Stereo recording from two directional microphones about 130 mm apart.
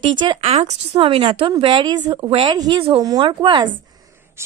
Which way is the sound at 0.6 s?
55° right (ahead or behind).